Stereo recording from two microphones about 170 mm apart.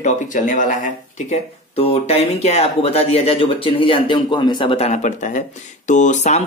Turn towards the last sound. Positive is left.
turn(degrees=45)  # may be behind; listen again after turning